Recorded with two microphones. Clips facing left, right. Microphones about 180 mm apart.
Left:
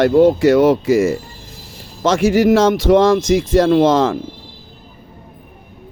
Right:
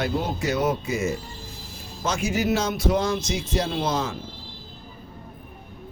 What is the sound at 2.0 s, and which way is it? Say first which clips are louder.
Speech: left 12 dB; 90° left.